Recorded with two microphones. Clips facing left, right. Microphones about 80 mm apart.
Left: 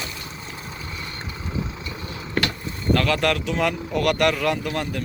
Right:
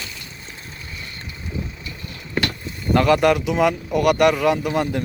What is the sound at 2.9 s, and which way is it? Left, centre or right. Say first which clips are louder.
Speech: right 8 dB; centre.